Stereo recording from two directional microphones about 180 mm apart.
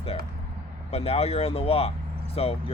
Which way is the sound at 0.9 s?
35° left (ahead or behind).